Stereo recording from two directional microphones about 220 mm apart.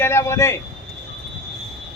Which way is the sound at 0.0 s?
10° left (ahead or behind).